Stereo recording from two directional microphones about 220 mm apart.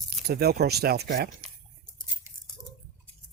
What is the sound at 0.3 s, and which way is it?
Speech, 45° right (ahead or behind).